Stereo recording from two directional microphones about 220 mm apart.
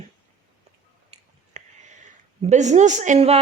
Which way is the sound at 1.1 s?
30° right (ahead or behind).